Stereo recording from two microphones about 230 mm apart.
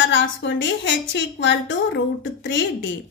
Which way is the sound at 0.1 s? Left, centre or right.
Left.